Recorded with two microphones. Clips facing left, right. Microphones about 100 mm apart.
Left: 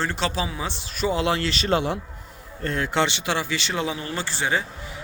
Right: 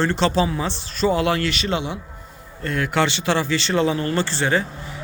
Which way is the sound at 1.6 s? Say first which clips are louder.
Left 2 dB; 45° left (ahead or behind).